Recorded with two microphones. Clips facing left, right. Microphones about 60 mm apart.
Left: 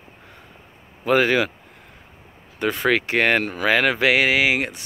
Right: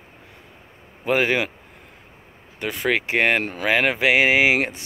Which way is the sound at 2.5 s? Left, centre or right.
Centre.